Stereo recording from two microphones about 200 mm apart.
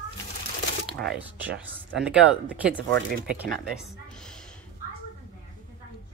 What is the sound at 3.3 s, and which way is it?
Speech, 5° right (ahead or behind).